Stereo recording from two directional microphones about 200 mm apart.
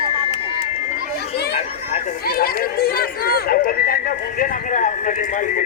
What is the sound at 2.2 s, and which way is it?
Speech, 50° left (ahead or behind).